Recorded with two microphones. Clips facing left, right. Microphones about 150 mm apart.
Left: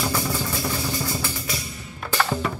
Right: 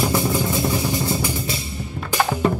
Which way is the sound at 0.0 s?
20° right (ahead or behind).